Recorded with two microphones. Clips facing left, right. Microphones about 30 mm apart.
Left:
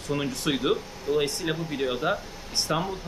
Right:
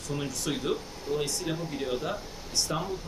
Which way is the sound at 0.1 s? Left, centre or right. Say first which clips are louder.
Left 5 dB; left.